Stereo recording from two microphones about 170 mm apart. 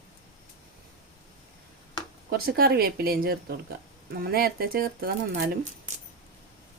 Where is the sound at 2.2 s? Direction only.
65° right (ahead or behind).